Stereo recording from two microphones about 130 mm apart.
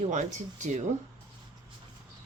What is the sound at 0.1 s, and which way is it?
Speech, 70° right (ahead or behind).